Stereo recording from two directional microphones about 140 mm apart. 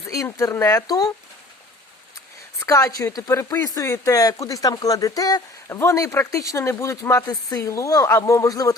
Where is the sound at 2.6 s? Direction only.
25° left (ahead or behind).